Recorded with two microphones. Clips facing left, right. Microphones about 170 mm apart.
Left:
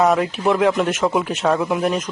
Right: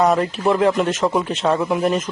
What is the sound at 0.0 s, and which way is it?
Speech, centre (ahead or behind).